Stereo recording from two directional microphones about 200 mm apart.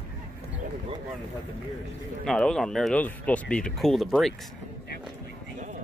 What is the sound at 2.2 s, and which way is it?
Speech, 5° left (ahead or behind).